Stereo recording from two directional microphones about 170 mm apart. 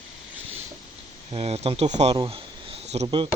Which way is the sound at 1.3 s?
35° right (ahead or behind).